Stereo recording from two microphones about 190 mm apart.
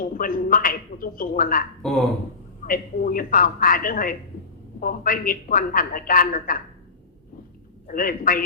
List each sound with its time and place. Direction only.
0.0 s a man's voice: 45° left (ahead or behind)
1.8 s speech: 5° left (ahead or behind)
2.6 s a man's voice: 50° left (ahead or behind)
7.9 s a man's voice: 45° left (ahead or behind)